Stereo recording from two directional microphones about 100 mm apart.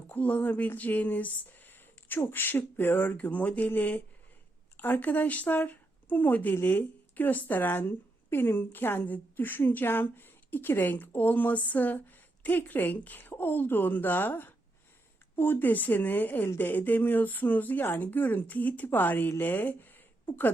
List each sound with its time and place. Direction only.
0.1 s speech: 15° left (ahead or behind)